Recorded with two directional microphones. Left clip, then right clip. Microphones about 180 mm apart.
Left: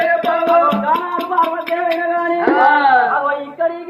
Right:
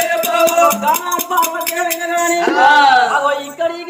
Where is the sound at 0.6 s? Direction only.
20° right (ahead or behind).